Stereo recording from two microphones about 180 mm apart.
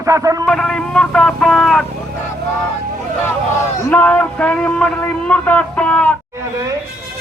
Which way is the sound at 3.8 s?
10° left (ahead or behind).